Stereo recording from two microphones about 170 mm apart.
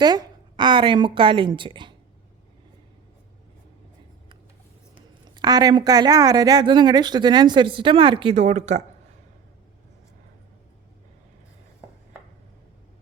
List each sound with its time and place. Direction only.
0.0 s speech: 25° right (ahead or behind)
5.3 s speech: 25° right (ahead or behind); by 8.8 s 40° right (ahead or behind)